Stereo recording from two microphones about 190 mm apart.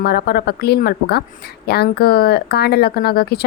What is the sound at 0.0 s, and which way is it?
Speech, 55° left (ahead or behind).